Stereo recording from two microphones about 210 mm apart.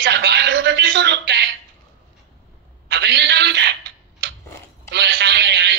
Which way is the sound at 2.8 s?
55° right (ahead or behind).